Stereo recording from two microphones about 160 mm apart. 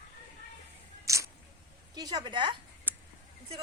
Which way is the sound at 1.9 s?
25° right (ahead or behind).